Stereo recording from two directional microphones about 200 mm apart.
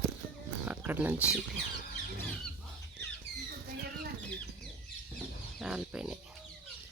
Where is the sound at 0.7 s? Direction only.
10° right (ahead or behind).